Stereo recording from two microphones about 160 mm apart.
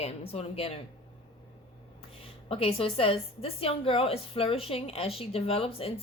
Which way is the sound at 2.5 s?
35° left (ahead or behind).